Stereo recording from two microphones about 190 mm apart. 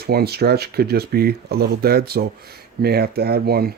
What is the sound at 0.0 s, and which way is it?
Speech, 55° right (ahead or behind).